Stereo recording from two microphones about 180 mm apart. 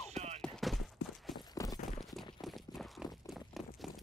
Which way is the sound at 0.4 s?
Centre (ahead or behind).